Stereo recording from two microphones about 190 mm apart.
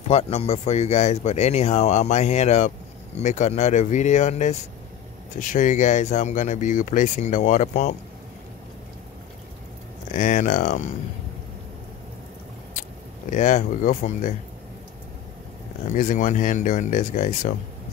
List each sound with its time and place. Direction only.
0.1 s speech: 30° left (ahead or behind)
10.1 s speech: 40° left (ahead or behind)
13.3 s speech: 40° left (ahead or behind)
15.9 s speech: 40° left (ahead or behind)